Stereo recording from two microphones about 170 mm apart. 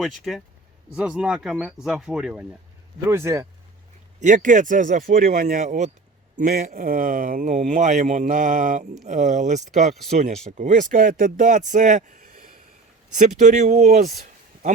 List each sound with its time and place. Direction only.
0.0 s speech: centre (ahead or behind); by 3.4 s 15° right (ahead or behind)
4.2 s speech: 50° right (ahead or behind)
6.4 s speech: 65° right (ahead or behind)
13.1 s speech: 45° right (ahead or behind)